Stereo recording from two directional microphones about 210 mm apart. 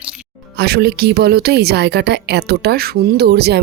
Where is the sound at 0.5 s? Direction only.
50° right (ahead or behind).